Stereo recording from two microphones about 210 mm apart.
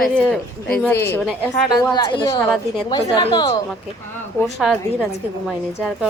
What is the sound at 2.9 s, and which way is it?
Speech, 20° left (ahead or behind).